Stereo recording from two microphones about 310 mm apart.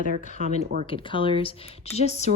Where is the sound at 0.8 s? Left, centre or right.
Centre.